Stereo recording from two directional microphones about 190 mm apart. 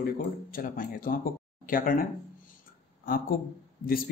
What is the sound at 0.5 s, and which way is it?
Speech, 50° left (ahead or behind).